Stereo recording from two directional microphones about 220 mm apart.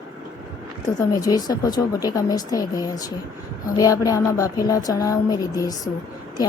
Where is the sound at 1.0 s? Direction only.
15° left (ahead or behind).